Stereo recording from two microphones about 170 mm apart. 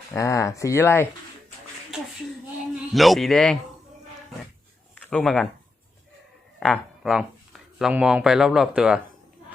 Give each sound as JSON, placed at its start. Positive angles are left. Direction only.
{"t": 0.1, "sound": "speech", "side_deg": 15}
{"t": 2.9, "sound": "a man's voice", "side_deg": 0}
{"t": 4.9, "sound": "speech", "side_deg": 5}
{"t": 6.6, "sound": "speech", "side_deg": 0}